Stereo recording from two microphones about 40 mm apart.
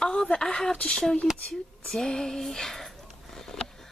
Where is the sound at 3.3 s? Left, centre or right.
Centre.